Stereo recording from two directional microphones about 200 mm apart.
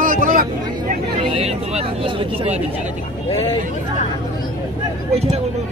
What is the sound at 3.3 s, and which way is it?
Speech, 30° left (ahead or behind).